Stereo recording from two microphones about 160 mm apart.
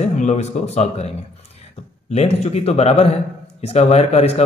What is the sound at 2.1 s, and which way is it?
Speech, 40° left (ahead or behind).